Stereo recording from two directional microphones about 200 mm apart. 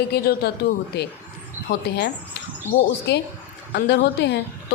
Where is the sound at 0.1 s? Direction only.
55° left (ahead or behind).